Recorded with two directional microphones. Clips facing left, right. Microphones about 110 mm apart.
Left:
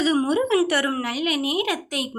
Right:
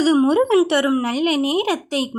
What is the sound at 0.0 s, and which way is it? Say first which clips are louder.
Speech: right 5 dB; 30° right (ahead or behind).